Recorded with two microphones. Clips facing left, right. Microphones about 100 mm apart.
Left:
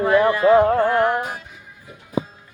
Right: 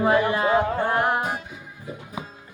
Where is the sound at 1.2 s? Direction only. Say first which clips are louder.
Right 1 dB; 35° right (ahead or behind).